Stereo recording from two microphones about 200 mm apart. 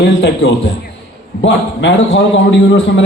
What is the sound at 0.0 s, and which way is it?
A man's voice, 70° left (ahead or behind).